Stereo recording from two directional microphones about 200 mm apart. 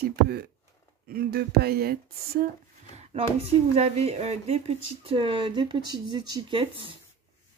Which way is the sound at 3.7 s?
30° right (ahead or behind).